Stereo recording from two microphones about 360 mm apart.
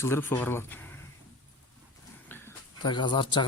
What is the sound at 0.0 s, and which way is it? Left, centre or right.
Speech, centre.